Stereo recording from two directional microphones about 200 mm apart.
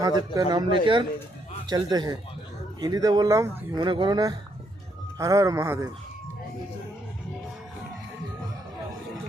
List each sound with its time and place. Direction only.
0.0 s speech: 20° right (ahead or behind)
3.8 s speech: 25° right (ahead or behind)